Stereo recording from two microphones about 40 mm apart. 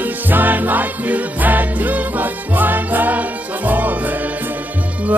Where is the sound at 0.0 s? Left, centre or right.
Right.